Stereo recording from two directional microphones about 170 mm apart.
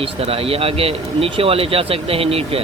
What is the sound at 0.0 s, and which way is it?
A man's voice, 35° right (ahead or behind).